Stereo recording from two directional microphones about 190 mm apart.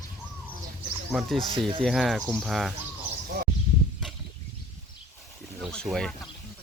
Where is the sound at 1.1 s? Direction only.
Centre (ahead or behind).